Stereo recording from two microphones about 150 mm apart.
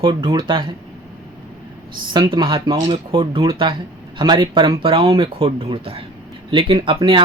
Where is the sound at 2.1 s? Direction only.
30° right (ahead or behind).